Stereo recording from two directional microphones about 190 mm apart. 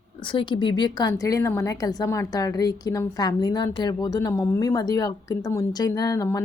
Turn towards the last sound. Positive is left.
turn(degrees=15)  # may be behind; listen again after turning